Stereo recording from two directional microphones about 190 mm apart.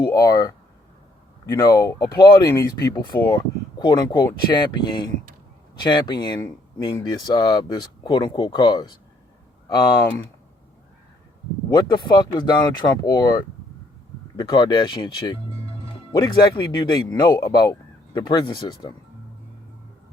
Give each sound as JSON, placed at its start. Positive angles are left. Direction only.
{"t": 0.0, "sound": "speech", "side_deg": 20}
{"t": 11.7, "sound": "speech", "side_deg": 20}